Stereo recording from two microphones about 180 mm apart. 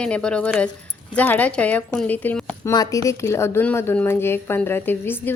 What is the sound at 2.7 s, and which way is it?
A woman's voice, 20° left (ahead or behind).